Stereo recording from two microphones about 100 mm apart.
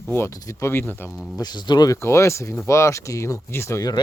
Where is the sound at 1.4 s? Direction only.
45° left (ahead or behind).